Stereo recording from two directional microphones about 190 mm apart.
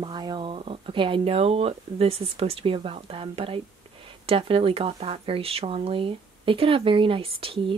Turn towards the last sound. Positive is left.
turn(degrees=-30)  # may be behind; listen again after turning